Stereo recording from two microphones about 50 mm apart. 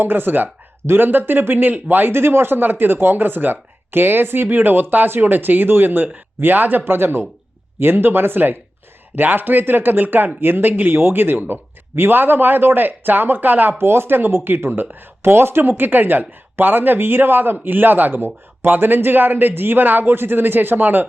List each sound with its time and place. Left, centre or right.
0.0 s speech: right
13.7 s speech: right
15.8 s speech: right